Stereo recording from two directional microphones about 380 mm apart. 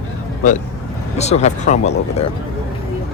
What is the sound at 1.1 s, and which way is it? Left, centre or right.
Speech, centre.